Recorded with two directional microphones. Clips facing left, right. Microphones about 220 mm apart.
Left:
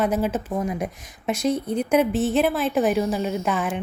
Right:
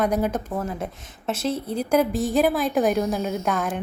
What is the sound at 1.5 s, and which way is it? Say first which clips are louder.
Speech: left 3 dB; 30° right (ahead or behind).